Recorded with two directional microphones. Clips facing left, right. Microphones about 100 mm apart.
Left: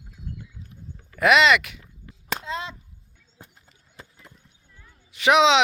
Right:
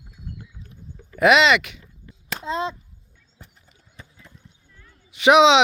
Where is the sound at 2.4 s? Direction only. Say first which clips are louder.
Right 10 dB; 25° right (ahead or behind).